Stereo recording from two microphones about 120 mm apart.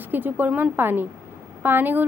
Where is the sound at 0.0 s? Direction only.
15° right (ahead or behind).